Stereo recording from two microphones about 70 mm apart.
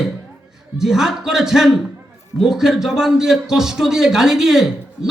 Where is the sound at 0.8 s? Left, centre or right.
Centre.